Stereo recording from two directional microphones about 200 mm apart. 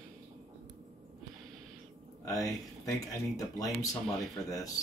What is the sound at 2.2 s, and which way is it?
Speech, 15° left (ahead or behind).